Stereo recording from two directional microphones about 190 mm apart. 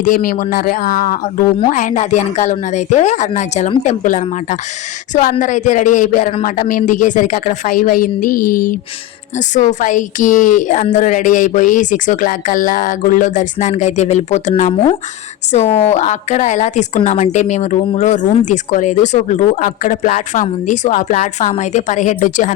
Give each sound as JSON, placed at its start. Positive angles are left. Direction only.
{"t": 0.0, "sound": "a man's voice", "side_deg": 45}
{"t": 5.4, "sound": "a man's voice", "side_deg": 40}